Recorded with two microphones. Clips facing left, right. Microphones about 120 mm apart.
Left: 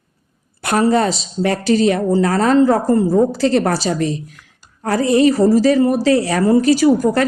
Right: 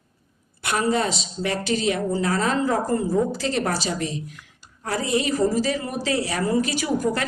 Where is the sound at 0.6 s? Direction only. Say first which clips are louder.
Left 8 dB; 40° left (ahead or behind).